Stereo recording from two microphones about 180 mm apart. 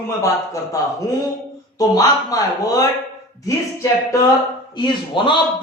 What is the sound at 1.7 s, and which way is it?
Speech, 20° left (ahead or behind).